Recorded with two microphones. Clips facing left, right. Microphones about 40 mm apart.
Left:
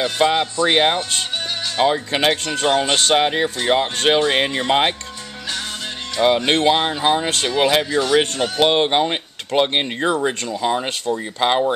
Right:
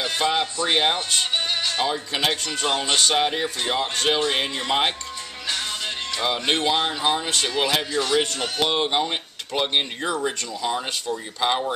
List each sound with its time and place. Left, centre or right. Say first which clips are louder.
0.2 s speech: left 7 dB; left
6.2 s speech: left 7 dB; left